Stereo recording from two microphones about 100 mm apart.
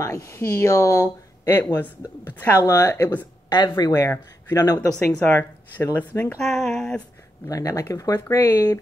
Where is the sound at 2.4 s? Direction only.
30° left (ahead or behind).